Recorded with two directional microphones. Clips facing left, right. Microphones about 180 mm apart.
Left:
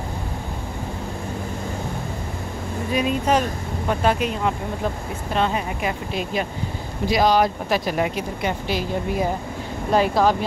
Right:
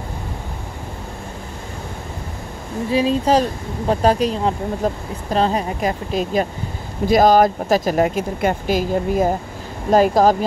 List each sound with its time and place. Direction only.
2.9 s speech: 30° right (ahead or behind)